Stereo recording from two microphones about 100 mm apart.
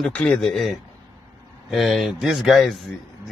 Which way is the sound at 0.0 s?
10° left (ahead or behind).